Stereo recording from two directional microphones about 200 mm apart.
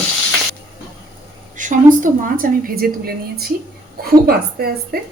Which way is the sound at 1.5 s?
40° right (ahead or behind).